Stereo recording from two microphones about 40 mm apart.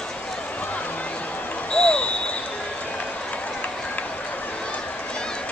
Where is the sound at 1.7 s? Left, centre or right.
Left.